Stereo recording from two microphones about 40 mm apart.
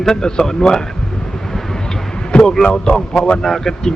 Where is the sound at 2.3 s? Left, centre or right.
Left.